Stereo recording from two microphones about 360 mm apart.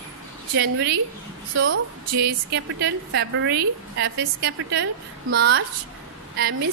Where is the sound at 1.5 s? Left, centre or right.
Right.